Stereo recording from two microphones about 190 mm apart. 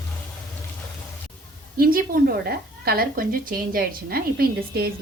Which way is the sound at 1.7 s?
50° right (ahead or behind).